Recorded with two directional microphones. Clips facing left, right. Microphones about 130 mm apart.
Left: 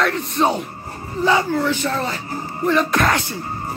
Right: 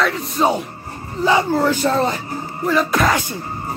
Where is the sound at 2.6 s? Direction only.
5° right (ahead or behind).